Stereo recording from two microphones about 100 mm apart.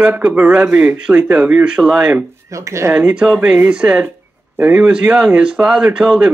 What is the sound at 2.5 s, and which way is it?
Speech, 30° right (ahead or behind).